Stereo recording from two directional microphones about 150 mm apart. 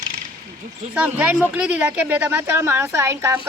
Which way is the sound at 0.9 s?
10° right (ahead or behind).